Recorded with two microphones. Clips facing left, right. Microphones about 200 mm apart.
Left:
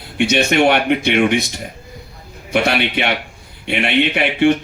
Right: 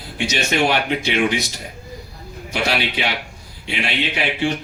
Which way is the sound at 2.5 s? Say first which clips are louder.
Left 5 dB; 60° left (ahead or behind).